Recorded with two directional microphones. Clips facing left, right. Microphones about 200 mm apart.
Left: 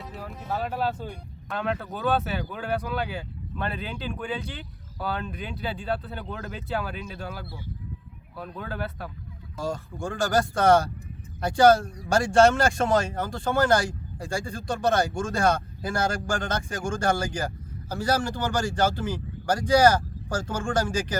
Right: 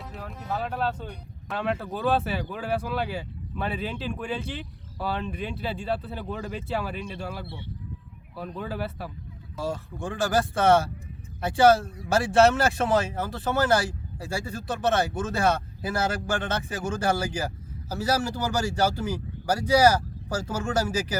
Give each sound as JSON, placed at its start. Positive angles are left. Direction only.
{"t": 0.0, "sound": "speech", "side_deg": 0}
{"t": 7.4, "sound": "speech", "side_deg": -30}
{"t": 8.4, "sound": "speech", "side_deg": 0}